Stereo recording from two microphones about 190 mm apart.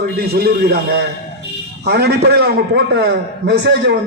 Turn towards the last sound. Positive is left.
turn(degrees=-60)  # may be behind; listen again after turning